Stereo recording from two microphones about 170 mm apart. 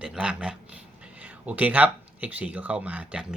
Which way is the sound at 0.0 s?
5° right (ahead or behind).